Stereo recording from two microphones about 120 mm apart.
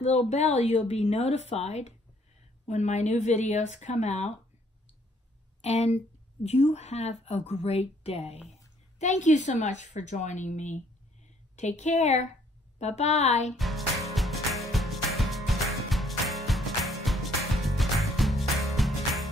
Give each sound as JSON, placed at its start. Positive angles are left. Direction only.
{"t": 0.3, "sound": "speech", "side_deg": 65}
{"t": 5.6, "sound": "a woman's voice", "side_deg": 65}
{"t": 9.0, "sound": "a woman's voice", "side_deg": 90}
{"t": 13.6, "sound": "music", "side_deg": 0}